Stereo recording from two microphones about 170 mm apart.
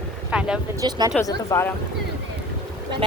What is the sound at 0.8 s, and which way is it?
Speech, 25° right (ahead or behind).